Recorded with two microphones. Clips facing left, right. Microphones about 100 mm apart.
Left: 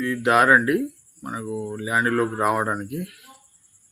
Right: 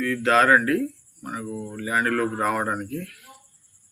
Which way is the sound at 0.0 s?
15° left (ahead or behind).